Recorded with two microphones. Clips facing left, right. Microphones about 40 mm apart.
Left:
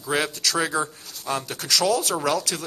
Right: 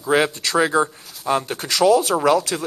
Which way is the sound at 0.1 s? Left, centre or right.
Right.